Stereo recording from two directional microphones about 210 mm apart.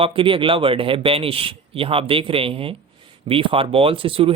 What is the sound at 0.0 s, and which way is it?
Speech, 25° right (ahead or behind).